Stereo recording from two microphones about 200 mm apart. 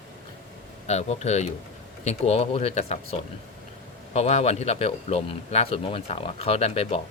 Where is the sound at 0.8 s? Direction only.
35° left (ahead or behind).